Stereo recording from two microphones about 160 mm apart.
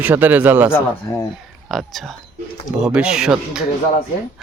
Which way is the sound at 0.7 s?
15° left (ahead or behind).